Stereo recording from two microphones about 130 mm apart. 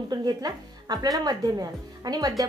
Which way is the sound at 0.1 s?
30° right (ahead or behind).